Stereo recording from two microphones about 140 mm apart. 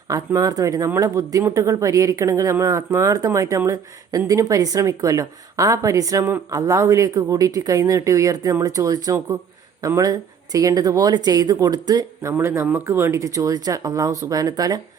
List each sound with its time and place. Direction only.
0.3 s a woman's voice: 25° right (ahead or behind)